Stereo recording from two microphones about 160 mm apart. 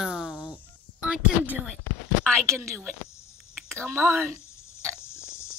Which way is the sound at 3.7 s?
5° left (ahead or behind).